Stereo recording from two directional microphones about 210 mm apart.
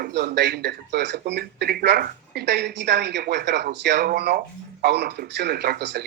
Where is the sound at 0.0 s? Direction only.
50° right (ahead or behind).